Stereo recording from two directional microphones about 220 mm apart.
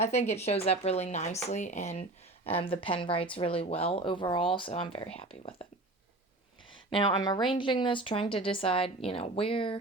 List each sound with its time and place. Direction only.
0.0 s speech: 30° left (ahead or behind)
6.9 s speech: 20° left (ahead or behind)